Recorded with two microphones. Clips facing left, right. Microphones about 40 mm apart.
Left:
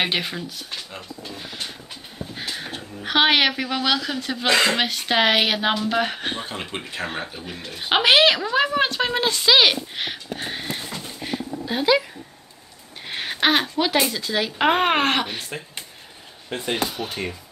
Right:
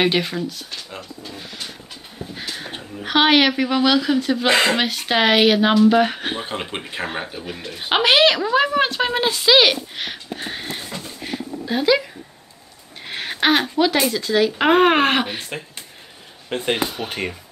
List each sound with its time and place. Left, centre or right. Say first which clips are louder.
0.0 s speech: right 5 dB; centre
2.3 s speech: even; centre
4.5 s speech: right 1 dB; centre
4.7 s speech: right 1 dB; centre
6.7 s speech: right 2 dB; centre
11.1 s a sound: left 1 dB; centre
13.0 s speech: right 1 dB; centre
16.4 s speech: right 3 dB; right